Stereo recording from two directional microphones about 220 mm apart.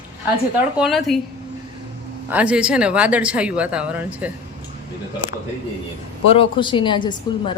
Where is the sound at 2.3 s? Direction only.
5° right (ahead or behind).